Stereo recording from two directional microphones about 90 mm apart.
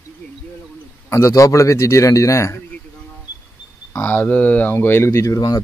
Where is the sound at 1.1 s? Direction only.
35° left (ahead or behind).